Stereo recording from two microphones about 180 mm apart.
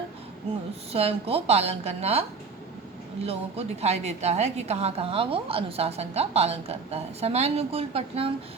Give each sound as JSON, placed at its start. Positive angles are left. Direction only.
{"t": 0.9, "sound": "a woman's voice", "side_deg": -35}
{"t": 3.2, "sound": "a woman's voice", "side_deg": -35}